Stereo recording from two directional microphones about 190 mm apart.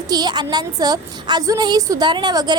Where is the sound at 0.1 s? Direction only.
20° right (ahead or behind).